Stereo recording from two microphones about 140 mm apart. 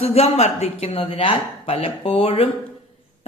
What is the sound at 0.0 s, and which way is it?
A woman's voice, 45° left (ahead or behind).